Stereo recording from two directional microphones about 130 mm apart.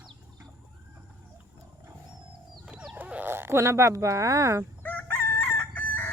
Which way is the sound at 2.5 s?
5° right (ahead or behind).